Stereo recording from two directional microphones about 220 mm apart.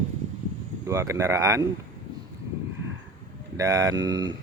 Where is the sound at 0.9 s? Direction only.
15° right (ahead or behind).